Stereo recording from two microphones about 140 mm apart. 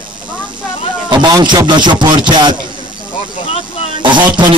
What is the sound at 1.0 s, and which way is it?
Speech, 30° right (ahead or behind).